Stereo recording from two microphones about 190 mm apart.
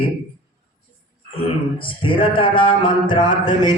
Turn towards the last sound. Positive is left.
turn(degrees=20)  # may be behind; listen again after turning